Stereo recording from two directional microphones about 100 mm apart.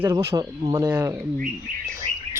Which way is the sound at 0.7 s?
35° right (ahead or behind).